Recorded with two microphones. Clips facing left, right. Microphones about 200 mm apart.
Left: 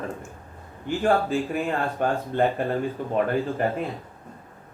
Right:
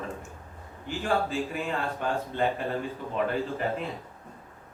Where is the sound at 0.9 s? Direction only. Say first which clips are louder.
Left 6 dB; 50° left (ahead or behind).